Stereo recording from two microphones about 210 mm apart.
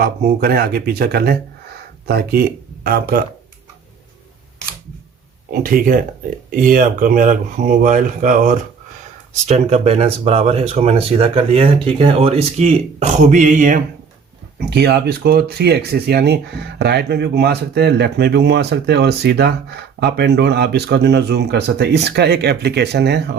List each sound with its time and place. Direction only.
0.0 s speech: 45° right (ahead or behind)
5.5 s speech: 45° right (ahead or behind)
14.7 s speech: 50° right (ahead or behind)